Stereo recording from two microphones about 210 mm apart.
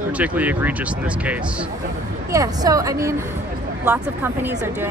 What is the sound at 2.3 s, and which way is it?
Speech, 15° right (ahead or behind).